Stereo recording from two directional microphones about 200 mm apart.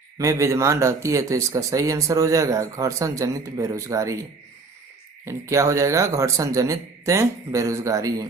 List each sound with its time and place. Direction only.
0.2 s speech: 15° right (ahead or behind)
5.2 s speech: 15° right (ahead or behind)